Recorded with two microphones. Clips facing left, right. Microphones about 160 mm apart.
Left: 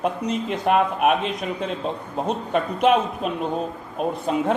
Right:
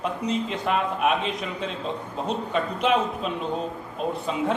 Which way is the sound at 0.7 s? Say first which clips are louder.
Left 5 dB; 55° left (ahead or behind).